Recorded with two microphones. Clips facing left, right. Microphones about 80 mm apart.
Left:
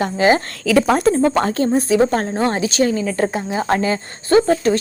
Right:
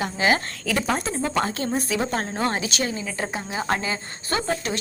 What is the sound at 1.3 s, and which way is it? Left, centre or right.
Speech, left.